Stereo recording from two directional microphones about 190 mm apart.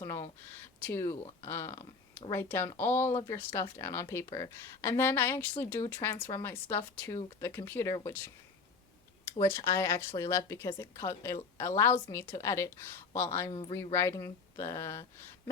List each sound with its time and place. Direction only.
0.0 s a sound: 15° left (ahead or behind)
0.8 s a woman's voice: 10° left (ahead or behind)
9.3 s a woman's voice: 15° left (ahead or behind)
13.5 s speech: 30° left (ahead or behind)
13.7 s a woman's voice: 15° left (ahead or behind)